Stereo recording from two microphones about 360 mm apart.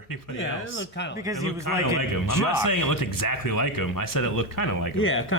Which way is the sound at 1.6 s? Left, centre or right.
Left.